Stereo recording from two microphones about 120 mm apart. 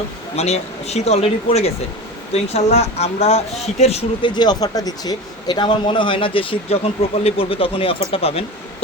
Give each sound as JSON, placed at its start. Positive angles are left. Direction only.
{"t": 0.3, "sound": "speech", "side_deg": 60}
{"t": 4.2, "sound": "a man's voice", "side_deg": 35}